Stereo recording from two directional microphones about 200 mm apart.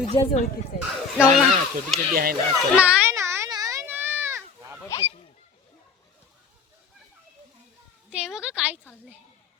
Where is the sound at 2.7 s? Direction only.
5° right (ahead or behind).